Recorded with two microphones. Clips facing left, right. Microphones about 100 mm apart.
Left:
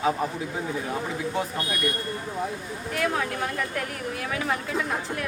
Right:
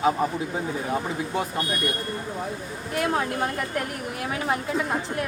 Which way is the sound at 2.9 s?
25° right (ahead or behind).